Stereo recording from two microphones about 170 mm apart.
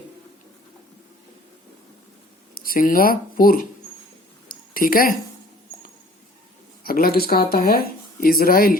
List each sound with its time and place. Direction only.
2.6 s speech: 60° left (ahead or behind)
4.4 s a sound: 60° left (ahead or behind)
6.8 s speech: 60° left (ahead or behind)